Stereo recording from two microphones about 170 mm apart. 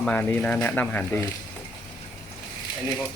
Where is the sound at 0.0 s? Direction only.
10° left (ahead or behind).